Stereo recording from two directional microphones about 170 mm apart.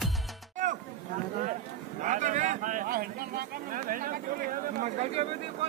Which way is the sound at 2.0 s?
45° right (ahead or behind).